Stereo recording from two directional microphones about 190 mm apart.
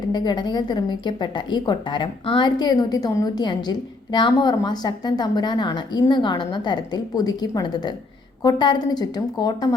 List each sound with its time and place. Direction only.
0.1 s a woman's voice: 20° left (ahead or behind)